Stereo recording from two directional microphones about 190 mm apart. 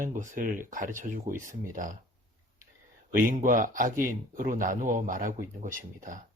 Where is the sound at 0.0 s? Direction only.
45° right (ahead or behind).